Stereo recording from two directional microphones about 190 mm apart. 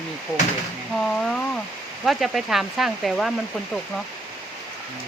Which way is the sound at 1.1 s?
5° left (ahead or behind).